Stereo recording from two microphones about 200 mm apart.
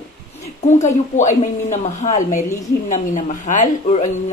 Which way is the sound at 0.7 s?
35° left (ahead or behind).